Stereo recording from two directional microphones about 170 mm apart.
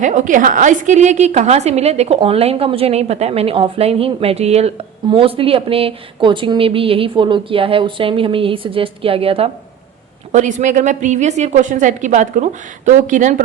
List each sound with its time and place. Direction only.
0.0 s a woman's voice: 45° right (ahead or behind)
10.3 s a woman's voice: 45° right (ahead or behind)